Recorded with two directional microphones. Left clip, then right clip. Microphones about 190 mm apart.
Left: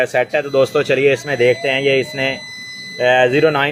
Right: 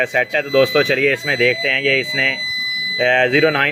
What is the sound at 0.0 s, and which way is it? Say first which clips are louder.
Speech: left 1 dB; centre (ahead or behind).